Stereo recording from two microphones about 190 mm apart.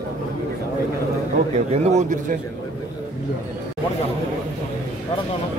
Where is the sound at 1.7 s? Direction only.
35° right (ahead or behind).